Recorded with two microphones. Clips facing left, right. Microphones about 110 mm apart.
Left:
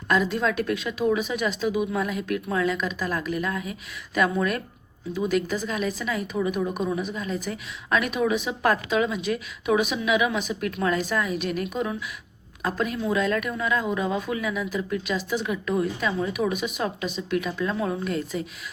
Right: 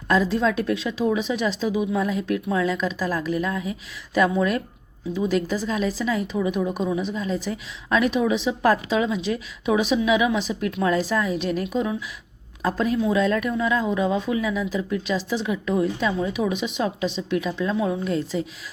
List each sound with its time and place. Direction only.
0.1 s a woman's voice: 30° right (ahead or behind)
16.1 s a woman's voice: 20° right (ahead or behind)